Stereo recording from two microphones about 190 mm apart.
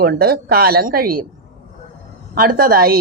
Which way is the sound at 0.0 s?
55° right (ahead or behind).